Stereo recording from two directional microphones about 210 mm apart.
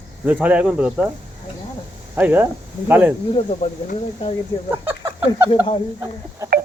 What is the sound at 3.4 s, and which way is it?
Speech, 30° left (ahead or behind).